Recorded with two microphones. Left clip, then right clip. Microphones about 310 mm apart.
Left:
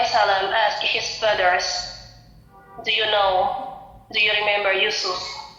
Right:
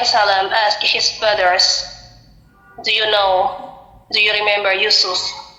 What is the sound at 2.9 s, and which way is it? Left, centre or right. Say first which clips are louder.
A woman's voice: right 4 dB; right.